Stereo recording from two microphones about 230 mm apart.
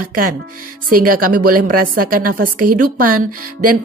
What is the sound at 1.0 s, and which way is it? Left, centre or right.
A woman's voice, right.